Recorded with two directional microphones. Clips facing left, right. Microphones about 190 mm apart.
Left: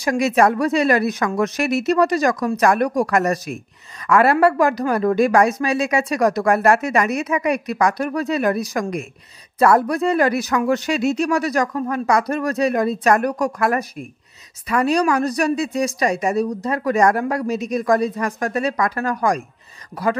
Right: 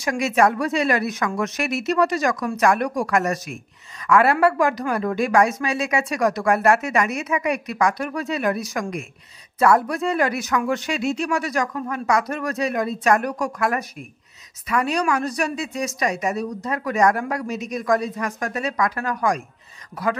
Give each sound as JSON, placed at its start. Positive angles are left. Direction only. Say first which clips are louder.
{"t": 0.0, "sound": "a woman's voice", "louder": "left 3 dB", "side_deg": 35}